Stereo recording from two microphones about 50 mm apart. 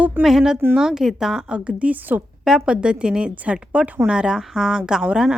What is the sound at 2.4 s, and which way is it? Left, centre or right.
A woman's voice, centre.